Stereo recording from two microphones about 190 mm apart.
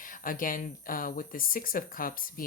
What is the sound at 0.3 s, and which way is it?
Speech, 45° left (ahead or behind).